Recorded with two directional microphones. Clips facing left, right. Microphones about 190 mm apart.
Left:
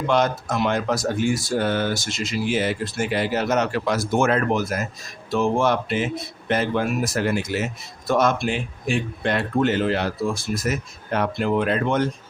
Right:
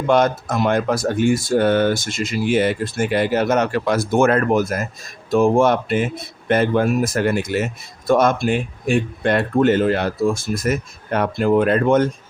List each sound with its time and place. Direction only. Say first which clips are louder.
0.1 s speech: right 5 dB; 50° right (ahead or behind)